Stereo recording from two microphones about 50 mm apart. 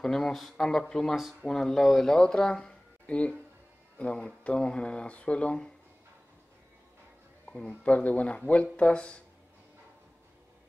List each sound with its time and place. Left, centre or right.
0.0 s speech: centre
1.1 s speech: centre
1.5 s speech: centre
2.1 s speech: centre
7.8 s speech: left